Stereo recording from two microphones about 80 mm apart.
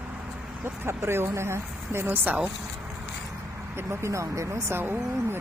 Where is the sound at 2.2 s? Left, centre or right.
Right.